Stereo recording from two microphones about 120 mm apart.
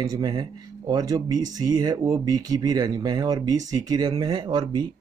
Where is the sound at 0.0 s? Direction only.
30° right (ahead or behind).